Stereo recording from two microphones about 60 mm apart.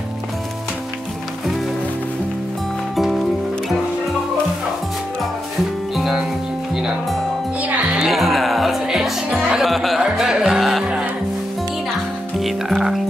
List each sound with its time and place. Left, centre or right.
5.9 s music: centre
7.6 s music: right
8.0 s music: centre
12.4 s music: centre